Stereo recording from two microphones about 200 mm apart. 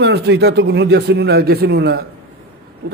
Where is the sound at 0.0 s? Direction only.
60° right (ahead or behind).